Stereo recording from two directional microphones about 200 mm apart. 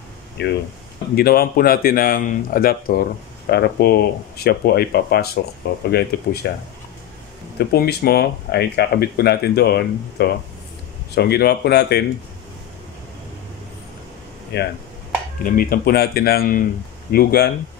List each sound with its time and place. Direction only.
0.4 s speech: 60° left (ahead or behind)
7.5 s speech: 50° left (ahead or behind)
14.5 s speech: 55° left (ahead or behind)